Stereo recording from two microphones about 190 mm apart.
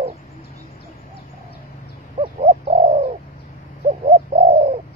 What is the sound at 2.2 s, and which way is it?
Bird, 35° right (ahead or behind).